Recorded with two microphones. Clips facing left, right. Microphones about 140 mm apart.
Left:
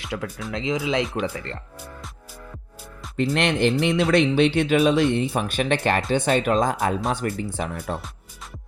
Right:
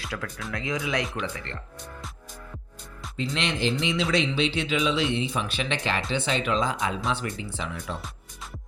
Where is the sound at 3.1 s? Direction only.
60° left (ahead or behind).